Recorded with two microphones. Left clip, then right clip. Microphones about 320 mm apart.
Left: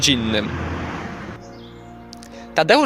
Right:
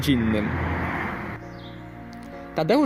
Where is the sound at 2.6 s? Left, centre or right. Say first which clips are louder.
Left 7 dB; left.